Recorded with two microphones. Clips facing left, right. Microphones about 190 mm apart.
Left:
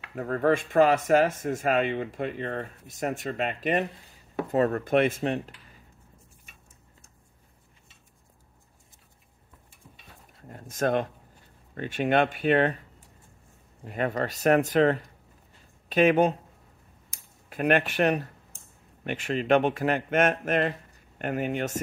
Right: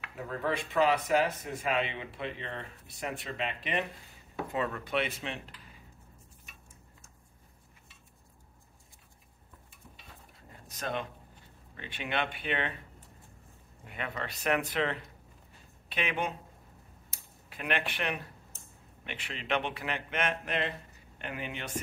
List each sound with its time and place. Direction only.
0.1 s speech: 55° left (ahead or behind)
10.5 s a sound: 50° left (ahead or behind)
11.7 s speech: 45° left (ahead or behind)
13.8 s speech: 40° left (ahead or behind)
17.5 s speech: 45° left (ahead or behind)